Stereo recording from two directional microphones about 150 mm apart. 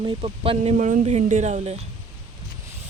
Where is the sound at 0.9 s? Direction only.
55° right (ahead or behind).